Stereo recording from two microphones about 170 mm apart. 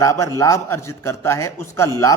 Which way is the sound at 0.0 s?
20° left (ahead or behind).